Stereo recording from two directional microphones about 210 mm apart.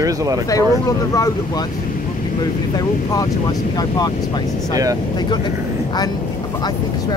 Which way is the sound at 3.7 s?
20° left (ahead or behind).